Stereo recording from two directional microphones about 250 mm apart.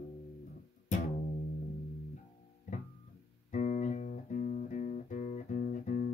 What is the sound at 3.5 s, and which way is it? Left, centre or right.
Music, left.